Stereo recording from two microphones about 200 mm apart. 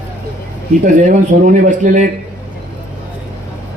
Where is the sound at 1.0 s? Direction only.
40° right (ahead or behind).